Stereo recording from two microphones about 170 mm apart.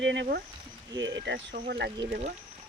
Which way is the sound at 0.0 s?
90° right.